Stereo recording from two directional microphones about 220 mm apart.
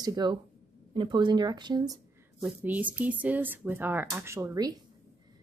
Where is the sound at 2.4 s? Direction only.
5° right (ahead or behind).